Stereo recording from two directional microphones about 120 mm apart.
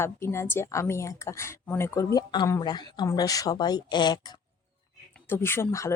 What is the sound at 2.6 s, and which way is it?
Speech, 35° left (ahead or behind).